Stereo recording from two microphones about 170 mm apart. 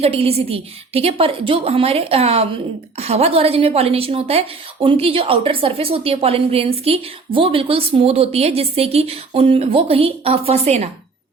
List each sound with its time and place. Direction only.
0.0 s a woman's voice: 35° right (ahead or behind)